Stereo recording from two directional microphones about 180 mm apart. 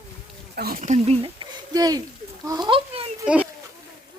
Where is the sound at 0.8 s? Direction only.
40° right (ahead or behind).